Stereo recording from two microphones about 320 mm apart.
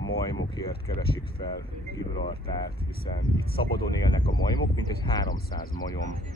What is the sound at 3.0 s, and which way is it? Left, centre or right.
Speech, left.